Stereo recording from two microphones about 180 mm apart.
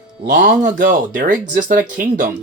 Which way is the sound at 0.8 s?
45° right (ahead or behind).